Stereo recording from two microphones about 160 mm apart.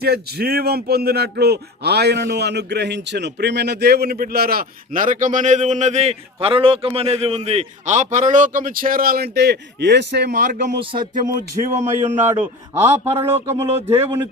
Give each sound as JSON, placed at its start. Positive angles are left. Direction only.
{"t": 0.0, "sound": "a man's voice", "side_deg": -80}
{"t": 10.8, "sound": "music", "side_deg": -30}
{"t": 11.6, "sound": "speech", "side_deg": -45}
{"t": 11.9, "sound": "a man's voice", "side_deg": -15}